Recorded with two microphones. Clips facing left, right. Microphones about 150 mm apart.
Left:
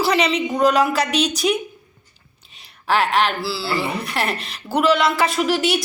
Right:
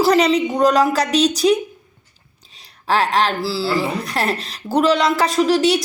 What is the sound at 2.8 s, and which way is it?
Speech, 35° right (ahead or behind).